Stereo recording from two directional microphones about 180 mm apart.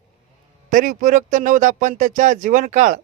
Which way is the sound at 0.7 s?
45° right (ahead or behind).